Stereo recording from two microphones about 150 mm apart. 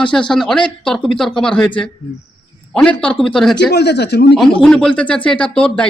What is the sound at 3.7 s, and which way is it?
Speech, 90° left.